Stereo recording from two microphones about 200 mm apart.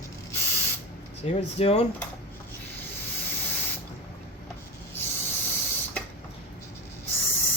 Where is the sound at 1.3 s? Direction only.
35° left (ahead or behind).